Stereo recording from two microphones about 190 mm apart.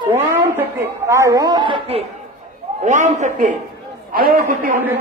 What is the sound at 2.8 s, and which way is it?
A man's voice, 40° right (ahead or behind).